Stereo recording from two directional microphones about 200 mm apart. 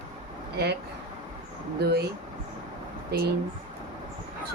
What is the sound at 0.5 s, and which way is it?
Speech, 55° right (ahead or behind).